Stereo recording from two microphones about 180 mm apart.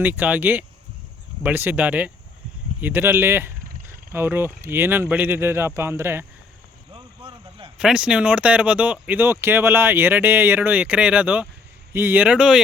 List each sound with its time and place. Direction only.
0.0 s speech: 10° right (ahead or behind)
6.9 s a sound: 30° right (ahead or behind)
7.8 s speech: 5° right (ahead or behind)